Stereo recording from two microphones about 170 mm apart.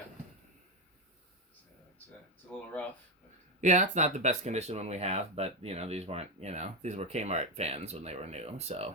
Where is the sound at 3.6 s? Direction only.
45° right (ahead or behind).